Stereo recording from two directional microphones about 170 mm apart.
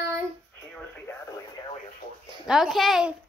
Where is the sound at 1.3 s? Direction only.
25° left (ahead or behind).